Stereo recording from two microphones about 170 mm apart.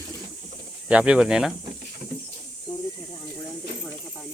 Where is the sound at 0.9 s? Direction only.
5° right (ahead or behind).